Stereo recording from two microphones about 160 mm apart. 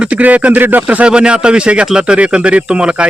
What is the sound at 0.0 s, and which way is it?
Speech, 10° right (ahead or behind).